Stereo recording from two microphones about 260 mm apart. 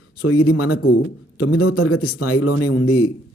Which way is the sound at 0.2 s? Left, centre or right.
Left.